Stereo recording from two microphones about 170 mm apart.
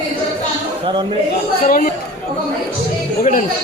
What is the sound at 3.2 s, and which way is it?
Speech, 50° left (ahead or behind).